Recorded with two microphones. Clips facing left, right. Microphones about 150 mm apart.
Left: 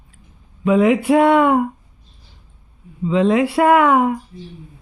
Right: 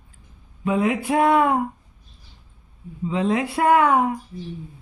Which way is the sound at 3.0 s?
90° left.